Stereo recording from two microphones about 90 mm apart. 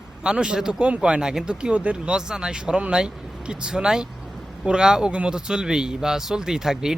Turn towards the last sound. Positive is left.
turn(degrees=-5)  # may be behind; listen again after turning